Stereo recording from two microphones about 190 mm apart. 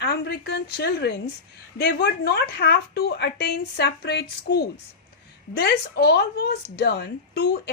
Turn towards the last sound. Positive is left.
turn(degrees=55)  # may be behind; listen again after turning